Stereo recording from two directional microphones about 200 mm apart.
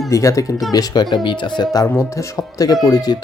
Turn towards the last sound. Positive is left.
turn(degrees=20)  # may be behind; listen again after turning